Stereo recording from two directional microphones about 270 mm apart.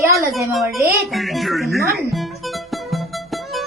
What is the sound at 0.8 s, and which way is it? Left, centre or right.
Music, centre.